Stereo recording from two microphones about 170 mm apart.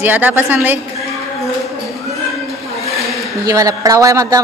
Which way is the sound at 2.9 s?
Centre (ahead or behind).